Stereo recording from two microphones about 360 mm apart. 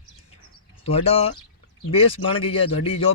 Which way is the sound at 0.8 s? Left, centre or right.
Centre.